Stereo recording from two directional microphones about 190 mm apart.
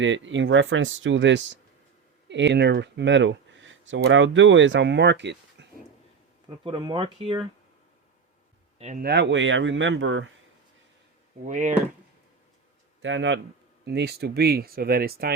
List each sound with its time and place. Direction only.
0.0 s speech: 80° right
6.7 s speech: 25° right (ahead or behind)
8.8 s speech: 40° right (ahead or behind)
9.0 s speech: 65° right (ahead or behind); by 10.3 s 90° right
11.4 s speech: 40° right (ahead or behind)
13.0 s speech: 75° right (ahead or behind)
13.8 s speech: 60° right (ahead or behind)